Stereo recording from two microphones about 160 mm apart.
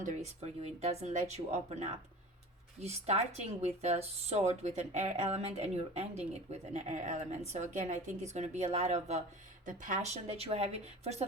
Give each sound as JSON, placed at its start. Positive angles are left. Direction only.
{"t": 0.0, "sound": "speech", "side_deg": -50}